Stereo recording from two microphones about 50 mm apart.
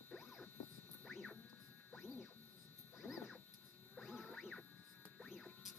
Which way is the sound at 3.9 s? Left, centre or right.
Centre.